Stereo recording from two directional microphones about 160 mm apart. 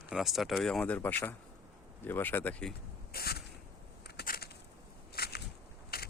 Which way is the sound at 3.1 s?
80° left.